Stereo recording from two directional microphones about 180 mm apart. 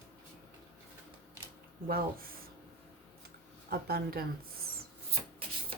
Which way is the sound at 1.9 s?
55° right (ahead or behind).